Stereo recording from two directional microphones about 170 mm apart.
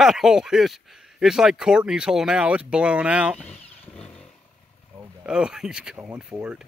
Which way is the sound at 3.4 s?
5° left (ahead or behind).